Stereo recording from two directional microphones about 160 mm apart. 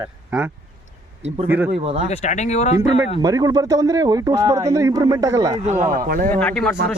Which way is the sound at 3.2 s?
20° right (ahead or behind).